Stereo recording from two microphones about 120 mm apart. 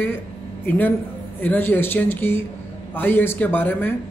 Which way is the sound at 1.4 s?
15° left (ahead or behind).